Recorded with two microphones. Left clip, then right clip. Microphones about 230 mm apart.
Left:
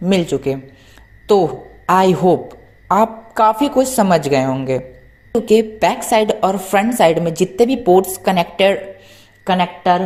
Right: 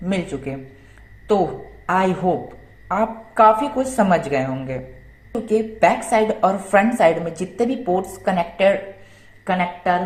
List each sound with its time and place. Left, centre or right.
0.0 s a woman's voice: left
1.9 s a woman's voice: left